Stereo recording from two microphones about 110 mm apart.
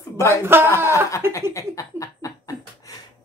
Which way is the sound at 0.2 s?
25° left (ahead or behind).